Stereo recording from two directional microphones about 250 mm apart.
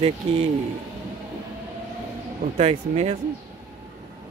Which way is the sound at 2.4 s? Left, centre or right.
Right.